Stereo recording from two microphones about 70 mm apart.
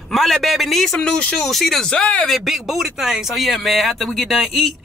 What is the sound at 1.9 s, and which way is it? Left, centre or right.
Speech, centre.